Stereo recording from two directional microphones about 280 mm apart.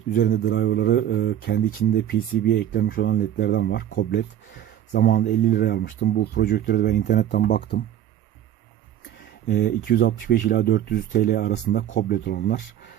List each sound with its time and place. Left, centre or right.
0.1 s speech: left
9.5 s speech: left